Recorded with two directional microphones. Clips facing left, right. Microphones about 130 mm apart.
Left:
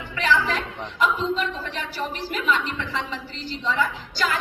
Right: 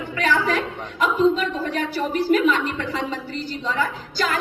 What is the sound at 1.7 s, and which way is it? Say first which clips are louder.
A woman's voice: right 7 dB; 45° right (ahead or behind).